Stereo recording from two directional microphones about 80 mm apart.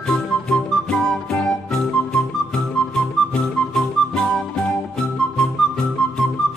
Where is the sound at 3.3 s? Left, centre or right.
Centre.